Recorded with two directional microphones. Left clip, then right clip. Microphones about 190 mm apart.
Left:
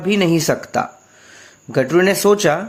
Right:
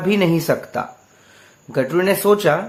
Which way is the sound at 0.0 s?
35° left (ahead or behind).